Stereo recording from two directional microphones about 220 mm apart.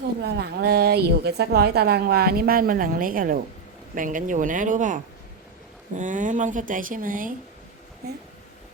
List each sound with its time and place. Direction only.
0.2 s a woman's voice: 50° right (ahead or behind)
6.0 s speech: 35° right (ahead or behind)